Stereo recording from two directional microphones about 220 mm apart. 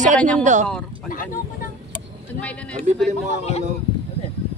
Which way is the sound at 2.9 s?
30° right (ahead or behind).